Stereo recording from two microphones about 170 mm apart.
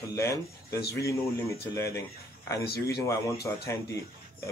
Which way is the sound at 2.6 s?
65° left (ahead or behind).